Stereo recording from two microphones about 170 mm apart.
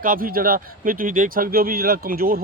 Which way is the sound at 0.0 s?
55° right (ahead or behind).